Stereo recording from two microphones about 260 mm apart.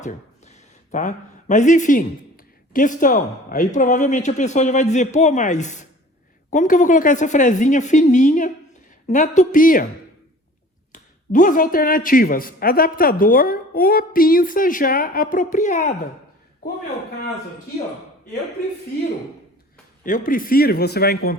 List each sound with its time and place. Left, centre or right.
0.0 s a man's voice: left
10.9 s a man's voice: left
20.1 s a man's voice: left